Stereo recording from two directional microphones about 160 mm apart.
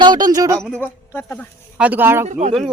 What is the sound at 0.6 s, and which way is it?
Speech, 5° left (ahead or behind).